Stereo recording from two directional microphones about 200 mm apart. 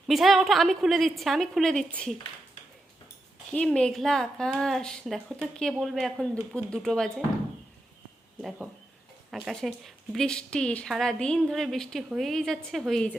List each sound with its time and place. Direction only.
0.1 s a woman's voice: centre (ahead or behind)
3.5 s a woman's voice: 5° left (ahead or behind)
8.4 s a woman's voice: centre (ahead or behind)